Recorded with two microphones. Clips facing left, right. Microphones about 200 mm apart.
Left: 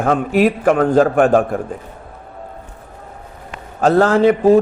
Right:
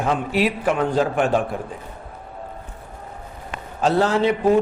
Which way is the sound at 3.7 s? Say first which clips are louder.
Left 6 dB; 50° left (ahead or behind).